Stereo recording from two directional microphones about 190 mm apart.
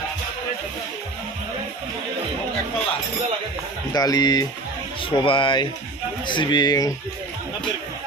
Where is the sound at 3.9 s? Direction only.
20° left (ahead or behind).